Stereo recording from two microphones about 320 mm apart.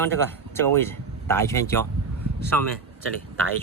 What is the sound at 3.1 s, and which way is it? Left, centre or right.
Speech, right.